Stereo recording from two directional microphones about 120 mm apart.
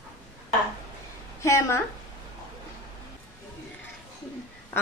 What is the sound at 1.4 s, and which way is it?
Speech, 25° left (ahead or behind).